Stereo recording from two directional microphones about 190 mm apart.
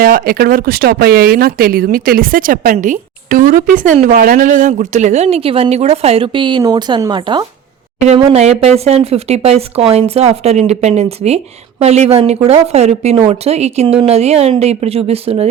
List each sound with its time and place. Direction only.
0.0 s speech: 50° right (ahead or behind); by 15.4 s 30° right (ahead or behind)